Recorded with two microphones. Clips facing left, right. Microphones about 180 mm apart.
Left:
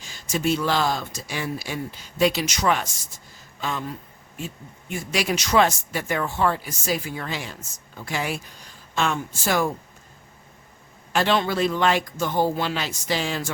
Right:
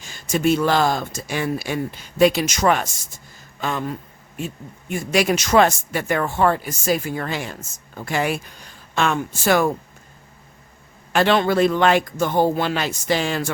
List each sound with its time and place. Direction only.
0.0 s speech: 55° right (ahead or behind)
11.1 s speech: 60° right (ahead or behind)